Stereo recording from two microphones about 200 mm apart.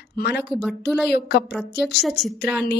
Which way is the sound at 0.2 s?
55° left (ahead or behind).